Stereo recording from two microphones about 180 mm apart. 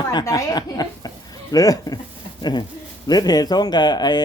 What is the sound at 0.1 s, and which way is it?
Speech, 20° left (ahead or behind).